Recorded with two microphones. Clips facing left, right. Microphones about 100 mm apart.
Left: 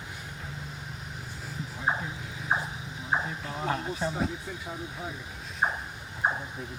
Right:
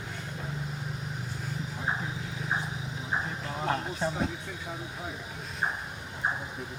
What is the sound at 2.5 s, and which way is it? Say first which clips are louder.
Vehicle: left 3 dB; 45° left (ahead or behind).